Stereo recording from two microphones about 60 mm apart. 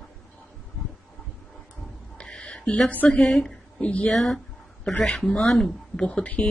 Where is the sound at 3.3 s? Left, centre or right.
Centre.